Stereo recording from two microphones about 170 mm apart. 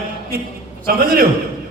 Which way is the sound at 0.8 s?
60° right (ahead or behind).